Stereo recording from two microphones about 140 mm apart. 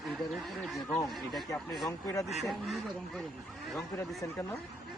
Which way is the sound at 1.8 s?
20° left (ahead or behind).